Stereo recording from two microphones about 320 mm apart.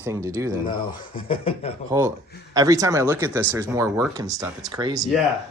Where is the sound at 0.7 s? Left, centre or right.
Centre.